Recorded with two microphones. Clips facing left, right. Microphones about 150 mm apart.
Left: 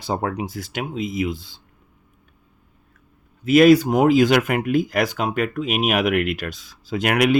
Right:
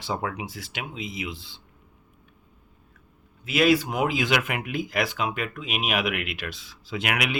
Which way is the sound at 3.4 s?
45° left (ahead or behind).